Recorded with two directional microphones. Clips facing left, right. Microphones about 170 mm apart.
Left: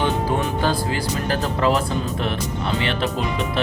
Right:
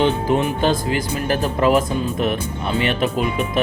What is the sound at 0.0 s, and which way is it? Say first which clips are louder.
Music: right 4 dB; 20° right (ahead or behind).